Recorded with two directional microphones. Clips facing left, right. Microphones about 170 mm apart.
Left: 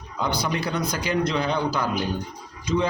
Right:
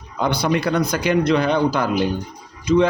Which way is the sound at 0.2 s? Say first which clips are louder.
Right 6 dB; 65° right (ahead or behind).